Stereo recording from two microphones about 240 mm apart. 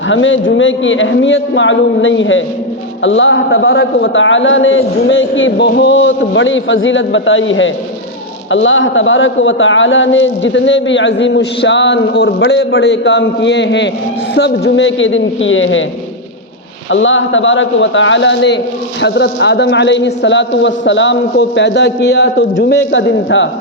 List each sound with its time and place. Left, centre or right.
0.1 s a man's voice: left
16.9 s a man's voice: left